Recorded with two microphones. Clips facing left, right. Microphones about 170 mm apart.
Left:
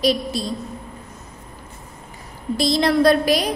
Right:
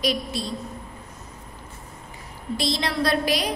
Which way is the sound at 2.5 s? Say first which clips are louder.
Left 8 dB; 40° left (ahead or behind).